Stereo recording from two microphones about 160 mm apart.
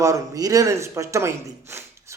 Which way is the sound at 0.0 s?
20° right (ahead or behind).